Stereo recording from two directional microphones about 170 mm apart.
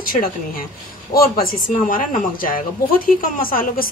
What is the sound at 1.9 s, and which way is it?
A woman's voice, 55° left (ahead or behind).